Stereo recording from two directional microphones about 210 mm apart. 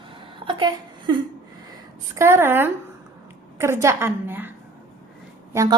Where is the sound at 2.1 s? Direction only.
10° right (ahead or behind).